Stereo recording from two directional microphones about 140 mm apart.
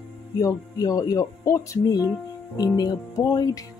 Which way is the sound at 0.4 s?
25° left (ahead or behind).